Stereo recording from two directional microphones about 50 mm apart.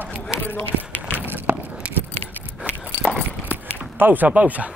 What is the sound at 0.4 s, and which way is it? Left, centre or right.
Run, left.